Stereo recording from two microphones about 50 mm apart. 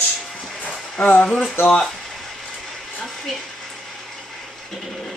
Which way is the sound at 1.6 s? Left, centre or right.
Centre.